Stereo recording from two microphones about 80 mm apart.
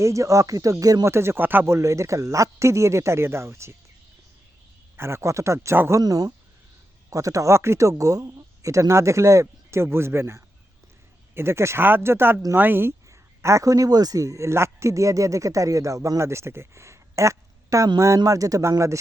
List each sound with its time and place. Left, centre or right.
0.0 s speech: right
1.1 s speech: right
4.9 s speech: right
6.0 s speech: right
13.1 s a man's voice: right